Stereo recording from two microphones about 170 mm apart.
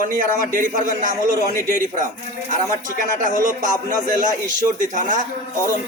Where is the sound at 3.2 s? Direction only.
50° right (ahead or behind).